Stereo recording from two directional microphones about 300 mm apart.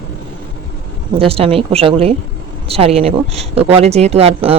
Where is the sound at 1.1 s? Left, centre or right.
Centre.